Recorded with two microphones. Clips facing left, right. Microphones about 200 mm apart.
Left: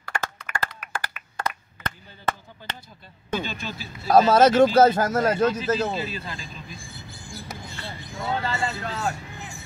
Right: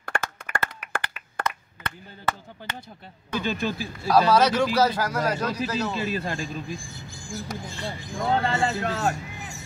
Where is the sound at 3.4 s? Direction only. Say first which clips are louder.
Right 7 dB; 50° right (ahead or behind).